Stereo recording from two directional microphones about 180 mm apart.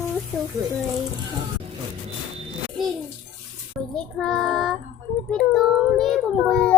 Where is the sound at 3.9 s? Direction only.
5° left (ahead or behind).